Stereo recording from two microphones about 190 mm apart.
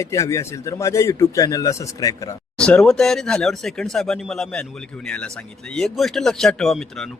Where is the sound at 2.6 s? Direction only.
5° left (ahead or behind).